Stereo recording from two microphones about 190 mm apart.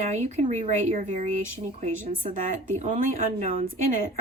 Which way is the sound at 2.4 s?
40° right (ahead or behind).